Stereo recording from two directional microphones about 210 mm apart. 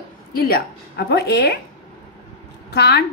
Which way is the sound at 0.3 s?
45° left (ahead or behind).